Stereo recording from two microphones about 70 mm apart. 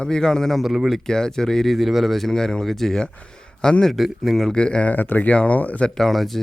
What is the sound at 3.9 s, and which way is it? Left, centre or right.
Speech, centre.